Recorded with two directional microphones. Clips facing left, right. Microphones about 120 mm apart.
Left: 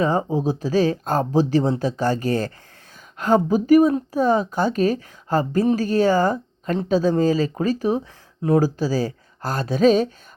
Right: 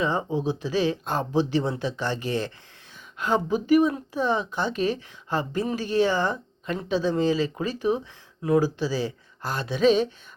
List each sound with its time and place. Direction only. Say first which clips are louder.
0.0 s speech: left 5 dB; 40° left (ahead or behind)